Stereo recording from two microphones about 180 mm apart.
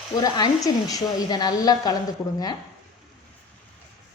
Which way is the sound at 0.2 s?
20° left (ahead or behind).